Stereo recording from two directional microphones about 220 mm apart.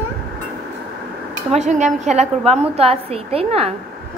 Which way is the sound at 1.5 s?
35° right (ahead or behind).